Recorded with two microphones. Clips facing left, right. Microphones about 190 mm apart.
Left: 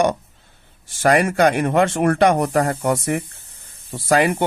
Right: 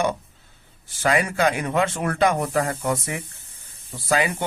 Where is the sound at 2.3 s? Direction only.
65° left (ahead or behind).